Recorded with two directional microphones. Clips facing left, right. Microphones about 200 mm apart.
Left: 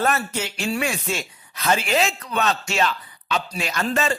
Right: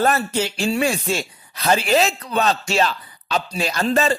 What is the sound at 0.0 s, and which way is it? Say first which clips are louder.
Speech: right 4 dB; 35° right (ahead or behind).